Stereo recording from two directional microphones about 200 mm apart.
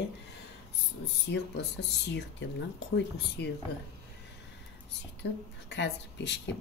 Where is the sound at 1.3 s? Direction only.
55° left (ahead or behind).